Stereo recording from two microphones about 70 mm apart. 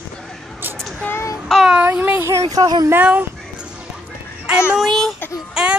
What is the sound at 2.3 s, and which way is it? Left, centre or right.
Speech, right.